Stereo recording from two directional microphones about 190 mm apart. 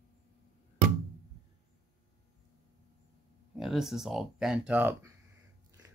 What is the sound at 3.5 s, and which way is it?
Speech, centre (ahead or behind).